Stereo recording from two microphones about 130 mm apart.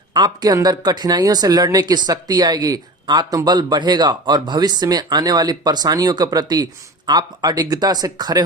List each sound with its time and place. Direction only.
0.1 s speech: 30° right (ahead or behind)